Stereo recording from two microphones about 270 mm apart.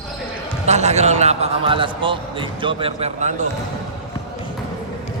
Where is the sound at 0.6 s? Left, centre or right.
Right.